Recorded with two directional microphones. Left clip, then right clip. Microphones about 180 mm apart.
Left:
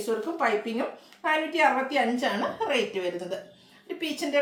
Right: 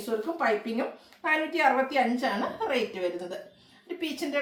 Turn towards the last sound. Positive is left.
turn(degrees=15)  # may be behind; listen again after turning